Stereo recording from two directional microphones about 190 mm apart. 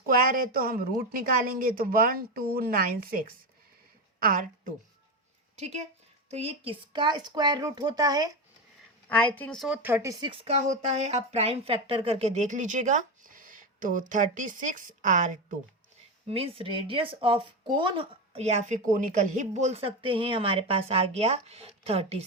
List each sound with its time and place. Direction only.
0.0 s a woman's voice: 45° right (ahead or behind)
5.5 s a woman's voice: 35° right (ahead or behind); by 8.4 s 20° right (ahead or behind)
9.0 s speech: 10° left (ahead or behind); by 15.5 s 40° right (ahead or behind)
16.3 s a woman's voice: 30° right (ahead or behind)